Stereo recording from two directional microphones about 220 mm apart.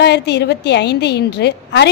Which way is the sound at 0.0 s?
50° left (ahead or behind).